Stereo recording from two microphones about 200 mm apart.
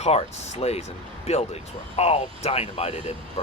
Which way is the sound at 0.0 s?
30° left (ahead or behind).